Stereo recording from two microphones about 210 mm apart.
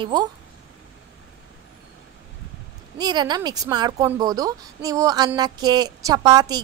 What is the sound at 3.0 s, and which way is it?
Speech, 20° right (ahead or behind).